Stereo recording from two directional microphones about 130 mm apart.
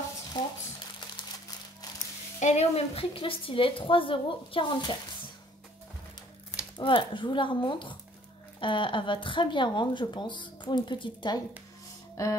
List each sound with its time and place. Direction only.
0.3 s speech: 30° left (ahead or behind)
2.4 s a woman's voice: 55° left (ahead or behind); by 4.9 s 40° left (ahead or behind)
6.8 s speech: 40° left (ahead or behind)